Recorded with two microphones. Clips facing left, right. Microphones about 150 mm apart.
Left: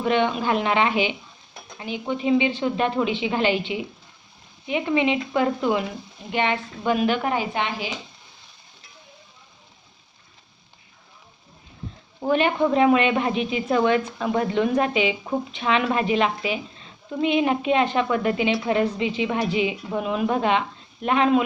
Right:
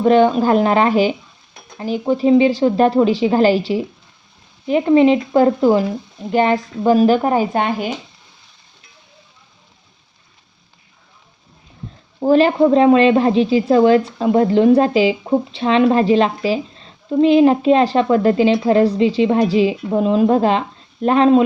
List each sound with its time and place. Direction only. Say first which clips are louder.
0.0 s a woman's voice: right 9 dB; 40° right (ahead or behind)
12.2 s a woman's voice: right 8 dB; 35° right (ahead or behind)